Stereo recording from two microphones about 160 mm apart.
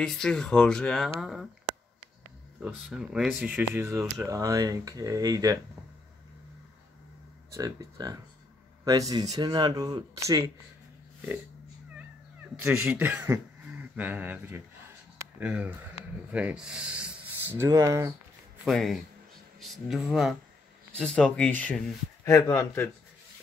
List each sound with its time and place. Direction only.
0.0 s speech: 5° left (ahead or behind)
2.6 s speech: 5° right (ahead or behind); by 5.6 s 20° right (ahead or behind)
7.5 s speech: 20° right (ahead or behind)
12.6 s speech: 10° right (ahead or behind)
18.7 s speech: centre (ahead or behind); by 22.8 s 15° left (ahead or behind)